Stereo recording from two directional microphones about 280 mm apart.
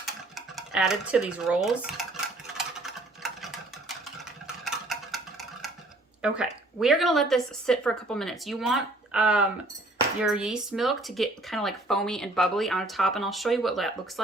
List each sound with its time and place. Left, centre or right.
0.0 s dishes: centre
4.4 s a sound: centre
6.2 s speech: centre